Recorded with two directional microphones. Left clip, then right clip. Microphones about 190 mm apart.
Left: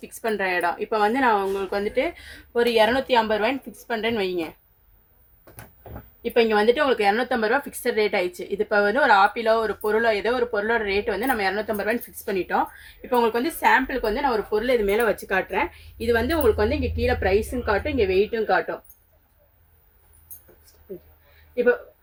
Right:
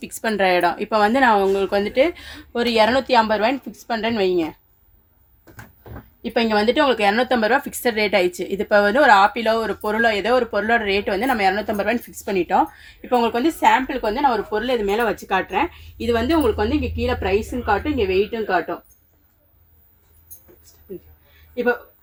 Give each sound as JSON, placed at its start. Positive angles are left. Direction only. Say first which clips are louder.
{"t": 0.0, "sound": "speech", "louder": "right 5 dB", "side_deg": -45}
{"t": 6.2, "sound": "speech", "louder": "even", "side_deg": -35}